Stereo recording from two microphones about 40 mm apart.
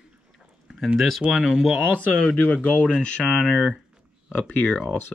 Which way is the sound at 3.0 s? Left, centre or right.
Left.